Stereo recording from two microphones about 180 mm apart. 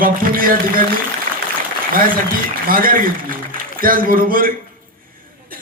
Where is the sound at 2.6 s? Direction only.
50° right (ahead or behind).